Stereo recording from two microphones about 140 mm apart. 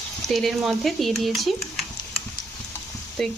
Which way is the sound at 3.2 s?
5° left (ahead or behind).